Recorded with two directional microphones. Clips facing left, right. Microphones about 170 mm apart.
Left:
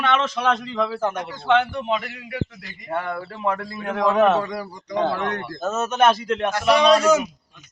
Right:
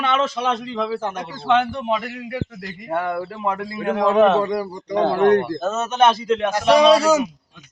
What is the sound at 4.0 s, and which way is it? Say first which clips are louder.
Speech: right 2 dB; 30° right (ahead or behind).